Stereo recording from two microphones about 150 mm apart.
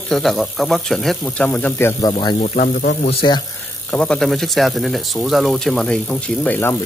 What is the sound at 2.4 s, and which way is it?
Speech, 65° left (ahead or behind).